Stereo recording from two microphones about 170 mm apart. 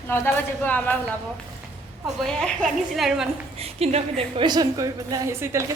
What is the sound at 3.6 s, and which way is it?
A woman's voice, 35° right (ahead or behind).